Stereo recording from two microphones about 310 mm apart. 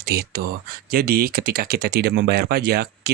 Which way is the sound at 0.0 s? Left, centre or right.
Right.